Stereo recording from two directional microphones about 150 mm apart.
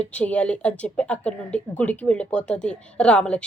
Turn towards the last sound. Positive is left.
turn(degrees=5)  # may be behind; listen again after turning